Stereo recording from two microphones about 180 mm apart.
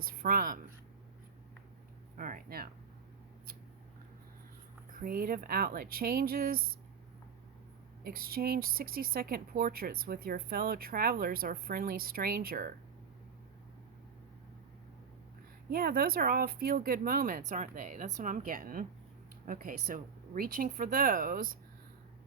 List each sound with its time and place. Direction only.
0.0 s speech: 55° right (ahead or behind)
2.1 s speech: 50° right (ahead or behind)
4.9 s a woman's voice: 55° right (ahead or behind)
8.0 s a woman's voice: 55° right (ahead or behind)
15.7 s speech: 55° right (ahead or behind)